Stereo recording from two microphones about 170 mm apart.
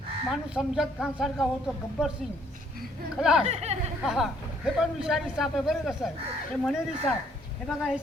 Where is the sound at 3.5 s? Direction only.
40° right (ahead or behind).